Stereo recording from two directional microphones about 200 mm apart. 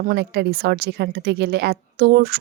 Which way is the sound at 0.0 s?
50° right (ahead or behind).